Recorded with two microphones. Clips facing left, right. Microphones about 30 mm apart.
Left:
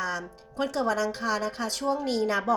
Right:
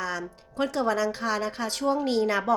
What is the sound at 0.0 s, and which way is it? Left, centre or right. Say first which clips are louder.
Speech: even; centre.